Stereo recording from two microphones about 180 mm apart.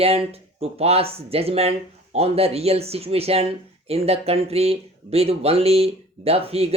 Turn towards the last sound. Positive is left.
turn(degrees=-35)  # may be behind; listen again after turning